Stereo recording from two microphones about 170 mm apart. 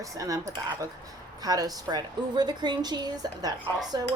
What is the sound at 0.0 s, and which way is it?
A woman's voice, 20° right (ahead or behind).